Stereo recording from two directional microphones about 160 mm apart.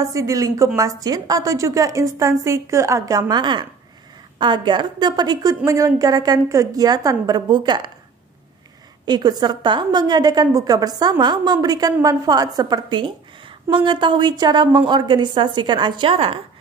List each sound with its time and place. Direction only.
0.0 s a woman's voice: 20° right (ahead or behind)
9.0 s a woman's voice: 25° right (ahead or behind)